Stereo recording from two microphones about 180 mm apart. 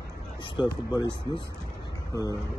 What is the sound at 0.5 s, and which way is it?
A man's voice, 25° left (ahead or behind).